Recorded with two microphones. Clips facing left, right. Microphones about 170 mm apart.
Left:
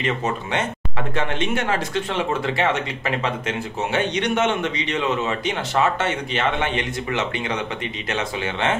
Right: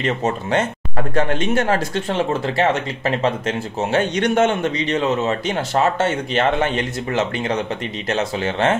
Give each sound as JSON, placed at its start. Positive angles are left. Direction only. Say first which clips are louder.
{"t": 0.0, "sound": "speech", "louder": "right 3 dB", "side_deg": -45}